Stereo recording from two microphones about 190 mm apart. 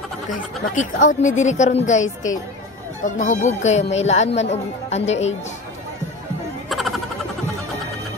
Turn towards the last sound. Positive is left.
turn(degrees=0)  # may be behind; listen again after turning